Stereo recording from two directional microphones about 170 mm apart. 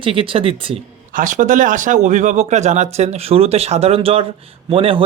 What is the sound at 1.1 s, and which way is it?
Speech, 50° right (ahead or behind).